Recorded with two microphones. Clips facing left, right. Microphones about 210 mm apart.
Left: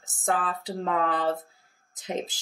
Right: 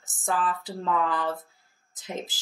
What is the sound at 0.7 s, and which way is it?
Speech, 60° left (ahead or behind).